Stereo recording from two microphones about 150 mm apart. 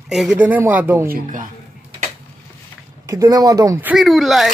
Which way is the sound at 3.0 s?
25° right (ahead or behind).